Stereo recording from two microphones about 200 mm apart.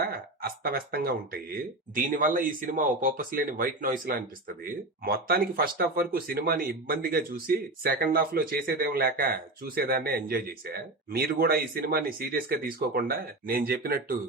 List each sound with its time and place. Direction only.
0.6 s speech: 50° right (ahead or behind)